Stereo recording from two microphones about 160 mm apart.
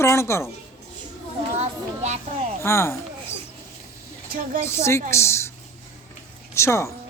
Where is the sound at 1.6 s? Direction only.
45° right (ahead or behind).